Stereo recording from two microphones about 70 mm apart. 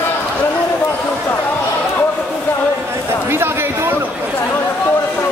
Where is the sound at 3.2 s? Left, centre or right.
Right.